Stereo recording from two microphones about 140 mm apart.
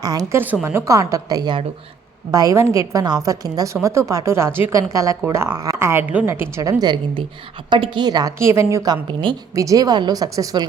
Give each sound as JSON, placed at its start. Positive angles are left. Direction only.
{"t": 0.0, "sound": "a woman's voice", "side_deg": -25}
{"t": 0.3, "sound": "a woman's voice", "side_deg": -15}